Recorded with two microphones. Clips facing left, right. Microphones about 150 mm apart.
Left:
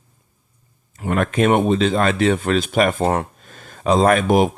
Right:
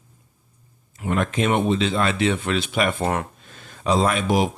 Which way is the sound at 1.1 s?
55° left (ahead or behind).